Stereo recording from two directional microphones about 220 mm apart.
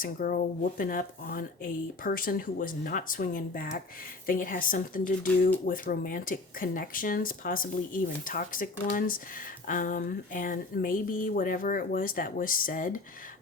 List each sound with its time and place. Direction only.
0.0 s speech: 40° left (ahead or behind)